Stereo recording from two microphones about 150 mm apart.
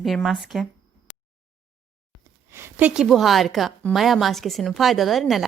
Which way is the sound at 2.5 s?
15° right (ahead or behind).